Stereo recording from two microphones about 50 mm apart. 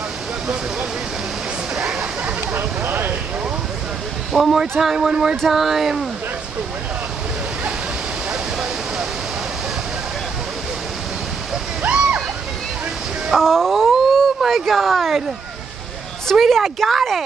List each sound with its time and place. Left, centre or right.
1.8 s a sound: centre
2.5 s a sound: right
4.3 s a woman's voice: centre
8.3 s waterfall: centre
11.8 s slosh: right
13.3 s speech: centre
16.3 s a woman's voice: centre